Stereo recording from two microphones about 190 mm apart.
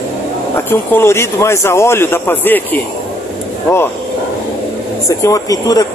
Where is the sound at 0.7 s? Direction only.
15° left (ahead or behind).